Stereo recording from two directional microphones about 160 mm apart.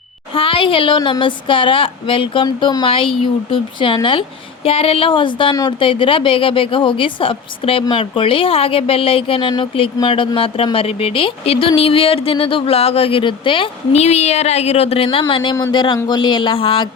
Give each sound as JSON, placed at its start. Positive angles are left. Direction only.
{"t": 0.3, "sound": "a woman's voice", "side_deg": 35}